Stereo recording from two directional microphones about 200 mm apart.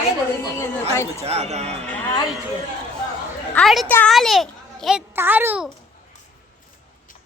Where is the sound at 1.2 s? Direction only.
30° right (ahead or behind).